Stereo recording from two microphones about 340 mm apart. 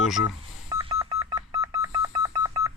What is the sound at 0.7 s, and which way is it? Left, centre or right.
Telephone dialing, centre.